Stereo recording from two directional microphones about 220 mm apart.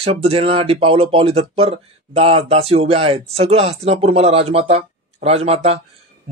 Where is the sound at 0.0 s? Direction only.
25° right (ahead or behind).